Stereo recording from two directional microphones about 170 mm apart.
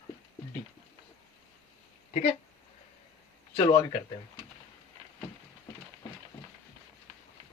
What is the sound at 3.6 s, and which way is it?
Speech, 25° left (ahead or behind).